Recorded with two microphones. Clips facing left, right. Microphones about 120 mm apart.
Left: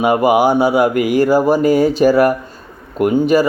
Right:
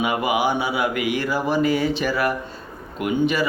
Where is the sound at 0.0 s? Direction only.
45° left (ahead or behind).